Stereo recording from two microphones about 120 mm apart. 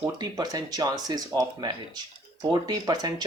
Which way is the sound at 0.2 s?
35° right (ahead or behind).